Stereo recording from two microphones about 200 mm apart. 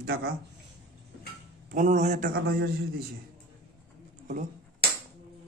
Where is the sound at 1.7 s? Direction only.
40° right (ahead or behind).